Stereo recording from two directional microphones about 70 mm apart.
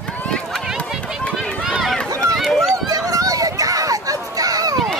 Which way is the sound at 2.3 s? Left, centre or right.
Centre.